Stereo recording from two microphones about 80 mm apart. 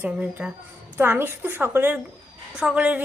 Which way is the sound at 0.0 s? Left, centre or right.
Centre.